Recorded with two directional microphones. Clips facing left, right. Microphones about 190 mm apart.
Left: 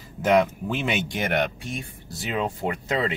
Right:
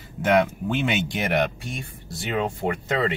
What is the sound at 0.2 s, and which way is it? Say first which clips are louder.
Speech: even; centre (ahead or behind).